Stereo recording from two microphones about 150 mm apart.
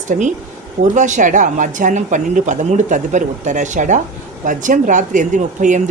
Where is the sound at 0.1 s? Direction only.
55° right (ahead or behind).